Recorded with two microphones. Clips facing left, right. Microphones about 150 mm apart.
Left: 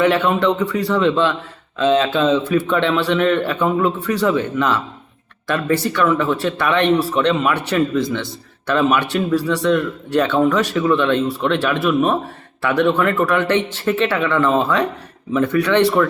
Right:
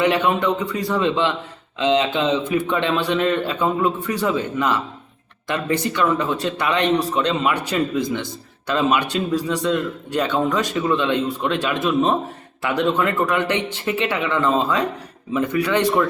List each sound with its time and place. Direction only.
0.0 s speech: 15° right (ahead or behind)
5.5 s speech: 20° right (ahead or behind)